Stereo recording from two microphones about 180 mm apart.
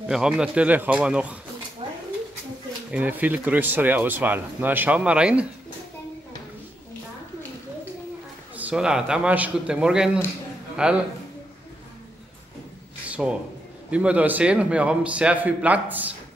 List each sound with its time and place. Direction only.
0.0 s speech: 5° right (ahead or behind)
1.8 s a sound: 30° right (ahead or behind)
2.9 s speech: 10° right (ahead or behind)
8.5 s speech: 5° right (ahead or behind)
13.1 s speech: 5° right (ahead or behind)